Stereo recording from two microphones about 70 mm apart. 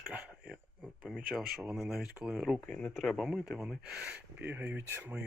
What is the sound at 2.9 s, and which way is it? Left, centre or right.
Speech, centre.